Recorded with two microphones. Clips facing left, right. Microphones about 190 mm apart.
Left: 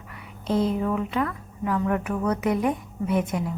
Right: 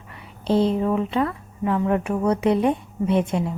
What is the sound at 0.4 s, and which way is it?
Speech, 30° right (ahead or behind).